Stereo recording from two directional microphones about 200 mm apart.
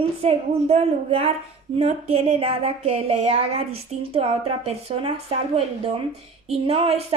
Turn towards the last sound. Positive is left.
turn(degrees=-30)  # may be behind; listen again after turning